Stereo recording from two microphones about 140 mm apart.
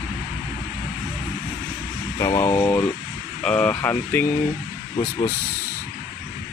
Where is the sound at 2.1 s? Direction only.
20° left (ahead or behind).